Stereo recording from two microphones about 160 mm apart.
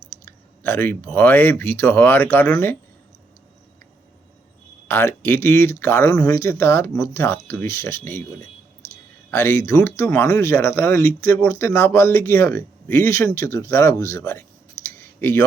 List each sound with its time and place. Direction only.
0.3 s speech: 15° left (ahead or behind)
4.9 s speech: 15° left (ahead or behind)
14.9 s a sound: 15° left (ahead or behind)